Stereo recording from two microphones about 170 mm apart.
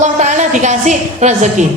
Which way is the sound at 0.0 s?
45° right (ahead or behind).